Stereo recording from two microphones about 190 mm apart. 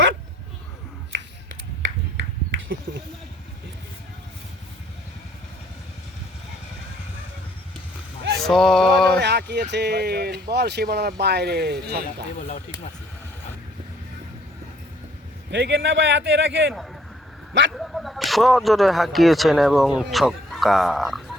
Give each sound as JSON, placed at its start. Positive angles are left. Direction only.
{"t": 1.1, "sound": "finger snapping", "side_deg": -80}
{"t": 2.5, "sound": "a sound", "side_deg": -80}
{"t": 8.2, "sound": "a sound", "side_deg": -55}
{"t": 8.4, "sound": "speech", "side_deg": 0}
{"t": 9.2, "sound": "speech", "side_deg": -60}
{"t": 15.4, "sound": "a man's voice", "side_deg": -70}
{"t": 17.7, "sound": "speech", "side_deg": 0}